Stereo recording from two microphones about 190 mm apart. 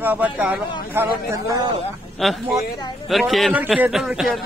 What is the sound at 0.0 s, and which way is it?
Speech, 10° right (ahead or behind).